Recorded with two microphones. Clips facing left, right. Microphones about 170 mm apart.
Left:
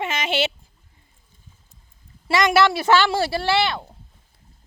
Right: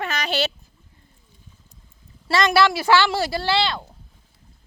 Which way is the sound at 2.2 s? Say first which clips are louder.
Left 1 dB; 20° left (ahead or behind).